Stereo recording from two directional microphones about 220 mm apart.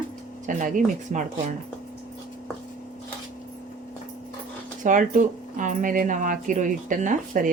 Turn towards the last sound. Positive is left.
turn(degrees=-35)  # may be behind; listen again after turning